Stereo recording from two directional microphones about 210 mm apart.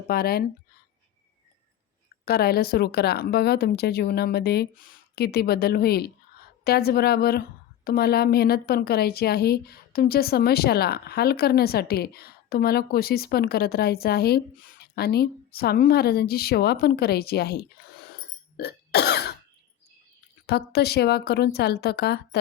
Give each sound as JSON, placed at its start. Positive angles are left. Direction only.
{"t": 0.1, "sound": "a woman's voice", "side_deg": 45}
{"t": 2.2, "sound": "a woman's voice", "side_deg": 50}
{"t": 20.5, "sound": "a woman's voice", "side_deg": 50}